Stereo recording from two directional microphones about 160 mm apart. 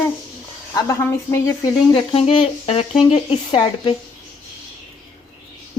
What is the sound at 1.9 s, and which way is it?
Speech, 35° left (ahead or behind).